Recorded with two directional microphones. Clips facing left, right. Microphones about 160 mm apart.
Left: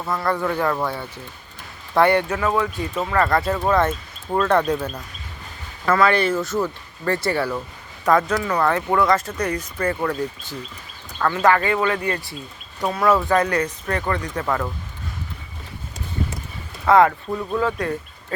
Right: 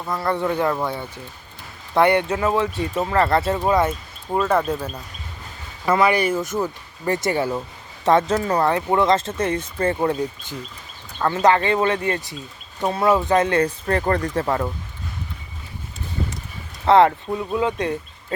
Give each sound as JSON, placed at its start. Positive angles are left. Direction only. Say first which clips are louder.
{"t": 0.2, "sound": "speech", "louder": "right 2 dB", "side_deg": -25}
{"t": 3.6, "sound": "speech", "louder": "even", "side_deg": -10}
{"t": 5.8, "sound": "speech", "louder": "even", "side_deg": -15}
{"t": 8.6, "sound": "speech", "louder": "left 1 dB", "side_deg": -20}
{"t": 16.8, "sound": "speech", "louder": "right 1 dB", "side_deg": -30}
{"t": 17.2, "sound": "speech", "louder": "even", "side_deg": -15}